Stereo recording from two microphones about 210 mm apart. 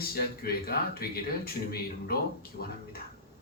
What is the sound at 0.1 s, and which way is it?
A man's voice, 45° left (ahead or behind).